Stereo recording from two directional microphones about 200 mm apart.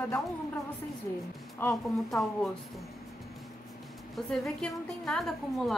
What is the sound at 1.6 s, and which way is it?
Speech, centre (ahead or behind).